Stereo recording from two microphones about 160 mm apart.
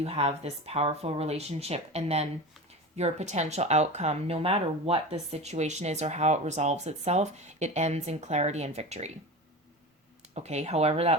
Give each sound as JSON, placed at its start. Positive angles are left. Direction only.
{"t": 0.0, "sound": "speech", "side_deg": -40}
{"t": 10.3, "sound": "speech", "side_deg": -45}